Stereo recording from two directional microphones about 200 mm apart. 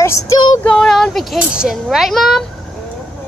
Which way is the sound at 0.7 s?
5° left (ahead or behind).